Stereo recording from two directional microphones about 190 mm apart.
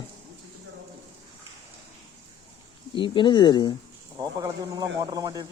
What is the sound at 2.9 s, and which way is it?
Speech, 25° left (ahead or behind).